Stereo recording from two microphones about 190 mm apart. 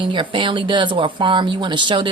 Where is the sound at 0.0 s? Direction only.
25° right (ahead or behind).